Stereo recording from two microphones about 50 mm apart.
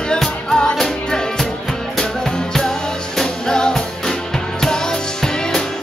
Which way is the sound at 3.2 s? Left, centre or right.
Centre.